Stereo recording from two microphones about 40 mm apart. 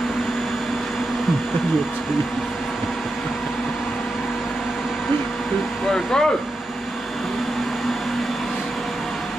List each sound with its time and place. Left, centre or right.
5.9 s speech: centre